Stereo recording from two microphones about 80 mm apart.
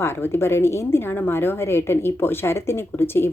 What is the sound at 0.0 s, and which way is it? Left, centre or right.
A woman's voice, left.